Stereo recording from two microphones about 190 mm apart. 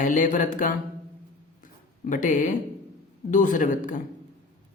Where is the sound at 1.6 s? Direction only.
45° left (ahead or behind).